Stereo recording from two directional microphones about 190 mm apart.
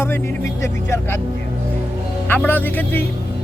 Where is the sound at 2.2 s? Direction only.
10° left (ahead or behind).